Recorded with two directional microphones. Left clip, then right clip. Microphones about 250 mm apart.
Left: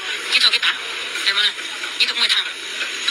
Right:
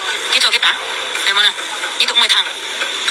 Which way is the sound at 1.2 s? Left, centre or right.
Centre.